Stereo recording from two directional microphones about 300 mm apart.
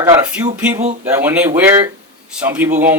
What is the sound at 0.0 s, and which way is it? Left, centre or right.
Speech, centre.